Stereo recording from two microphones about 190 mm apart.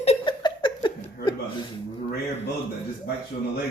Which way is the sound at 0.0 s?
30° left (ahead or behind).